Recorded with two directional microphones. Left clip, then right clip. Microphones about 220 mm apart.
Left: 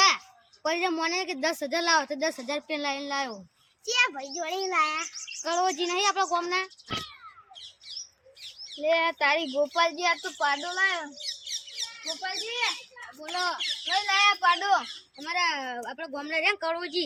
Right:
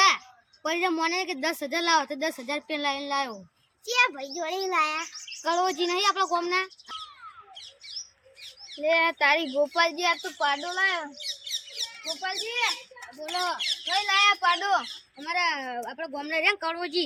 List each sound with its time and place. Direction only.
0.6 s a woman's voice: centre (ahead or behind)
3.8 s speech: 10° right (ahead or behind)
5.4 s a woman's voice: centre (ahead or behind)
8.7 s a woman's voice: 10° right (ahead or behind)
11.2 s a sound: 20° right (ahead or behind)
12.5 s a woman's voice: 5° right (ahead or behind)
15.2 s speech: 5° right (ahead or behind)